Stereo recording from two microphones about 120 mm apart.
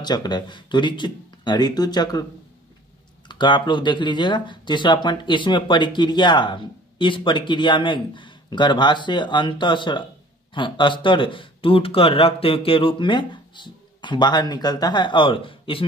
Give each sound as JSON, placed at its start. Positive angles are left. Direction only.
{"t": 0.0, "sound": "speech", "side_deg": 35}
{"t": 3.3, "sound": "speech", "side_deg": 40}